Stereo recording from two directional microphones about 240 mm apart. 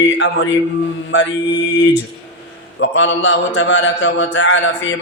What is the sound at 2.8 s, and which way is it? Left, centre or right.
Mantra, left.